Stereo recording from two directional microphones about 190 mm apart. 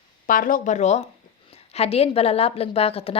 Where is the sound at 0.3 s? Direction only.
45° left (ahead or behind).